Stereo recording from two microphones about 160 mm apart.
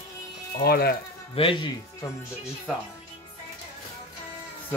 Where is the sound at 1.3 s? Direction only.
35° left (ahead or behind).